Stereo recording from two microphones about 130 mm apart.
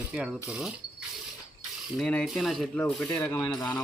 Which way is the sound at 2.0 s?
10° left (ahead or behind).